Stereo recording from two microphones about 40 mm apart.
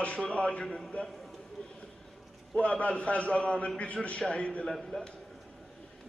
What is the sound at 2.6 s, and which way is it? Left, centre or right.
A man's voice, left.